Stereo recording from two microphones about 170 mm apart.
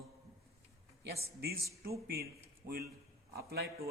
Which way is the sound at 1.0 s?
65° right (ahead or behind).